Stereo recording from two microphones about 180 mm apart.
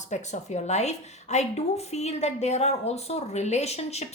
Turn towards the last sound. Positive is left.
turn(degrees=35)  # may be behind; listen again after turning